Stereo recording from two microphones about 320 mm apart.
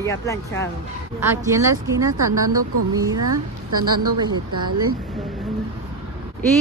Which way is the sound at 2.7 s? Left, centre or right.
Right.